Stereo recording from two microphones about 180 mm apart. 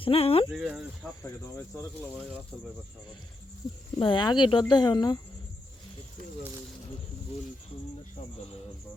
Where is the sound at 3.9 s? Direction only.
25° left (ahead or behind).